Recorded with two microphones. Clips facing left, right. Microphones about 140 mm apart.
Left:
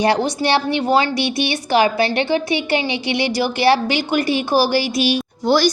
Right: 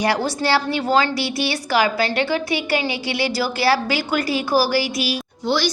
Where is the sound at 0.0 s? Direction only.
25° left (ahead or behind).